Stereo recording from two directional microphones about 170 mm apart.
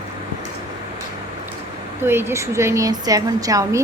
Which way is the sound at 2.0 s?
15° right (ahead or behind).